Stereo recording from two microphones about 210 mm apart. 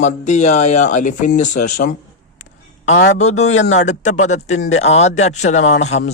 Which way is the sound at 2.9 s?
55° left (ahead or behind).